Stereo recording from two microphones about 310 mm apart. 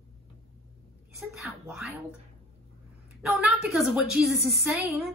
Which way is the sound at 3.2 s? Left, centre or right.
Centre.